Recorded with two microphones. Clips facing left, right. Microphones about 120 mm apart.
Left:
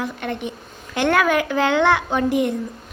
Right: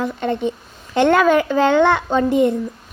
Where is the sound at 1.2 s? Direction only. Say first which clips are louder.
Right 4 dB; 10° left (ahead or behind).